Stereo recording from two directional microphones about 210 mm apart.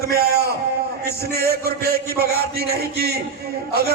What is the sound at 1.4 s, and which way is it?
A man's voice, 45° right (ahead or behind).